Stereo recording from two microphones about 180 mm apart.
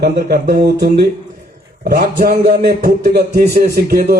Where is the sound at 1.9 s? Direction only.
55° right (ahead or behind).